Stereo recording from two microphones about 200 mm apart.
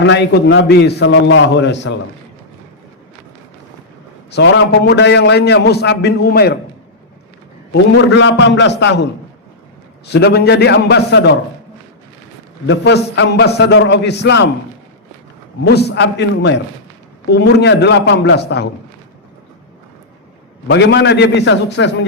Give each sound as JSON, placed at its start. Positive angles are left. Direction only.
{"t": 0.0, "sound": "a man's voice", "side_deg": 60}
{"t": 4.3, "sound": "a man's voice", "side_deg": 60}
{"t": 7.7, "sound": "a man's voice", "side_deg": 60}
{"t": 10.1, "sound": "a man's voice", "side_deg": 55}
{"t": 12.6, "sound": "a man's voice", "side_deg": 60}
{"t": 15.6, "sound": "a man's voice", "side_deg": 55}
{"t": 20.7, "sound": "a man's voice", "side_deg": 60}